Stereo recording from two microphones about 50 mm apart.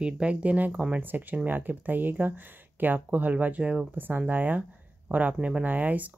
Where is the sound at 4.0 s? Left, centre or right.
Right.